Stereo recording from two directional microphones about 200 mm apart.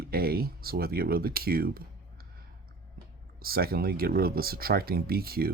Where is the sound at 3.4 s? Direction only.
50° right (ahead or behind).